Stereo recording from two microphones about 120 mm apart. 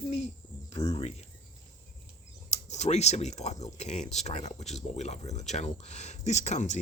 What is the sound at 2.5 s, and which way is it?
Speech, 70° left (ahead or behind).